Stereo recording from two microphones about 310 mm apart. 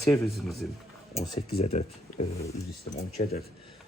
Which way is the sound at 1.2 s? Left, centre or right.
Centre.